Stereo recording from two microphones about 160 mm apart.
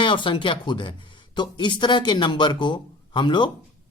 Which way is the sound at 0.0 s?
30° left (ahead or behind).